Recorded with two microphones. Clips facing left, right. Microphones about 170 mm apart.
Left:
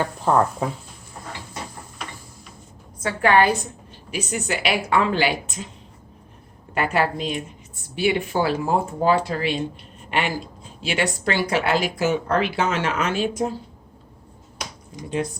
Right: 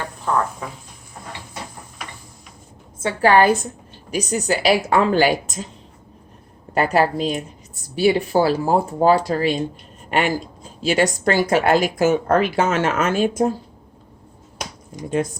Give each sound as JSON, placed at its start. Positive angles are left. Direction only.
{"t": 3.0, "sound": "speech", "side_deg": -30}
{"t": 6.7, "sound": "a woman's voice", "side_deg": -35}